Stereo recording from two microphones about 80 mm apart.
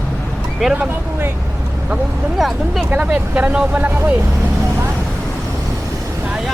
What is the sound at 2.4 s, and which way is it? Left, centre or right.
Speech, centre.